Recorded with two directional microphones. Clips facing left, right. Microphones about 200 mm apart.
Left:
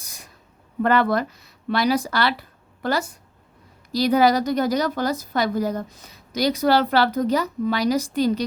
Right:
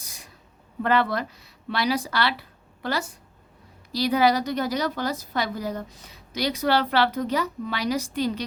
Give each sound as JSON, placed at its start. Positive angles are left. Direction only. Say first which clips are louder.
{"t": 0.8, "sound": "a woman's voice", "louder": "left 4 dB", "side_deg": 45}
{"t": 3.9, "sound": "a woman's voice", "louder": "left 3 dB", "side_deg": 45}